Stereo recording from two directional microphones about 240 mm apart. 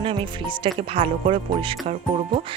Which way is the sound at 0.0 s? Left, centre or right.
Right.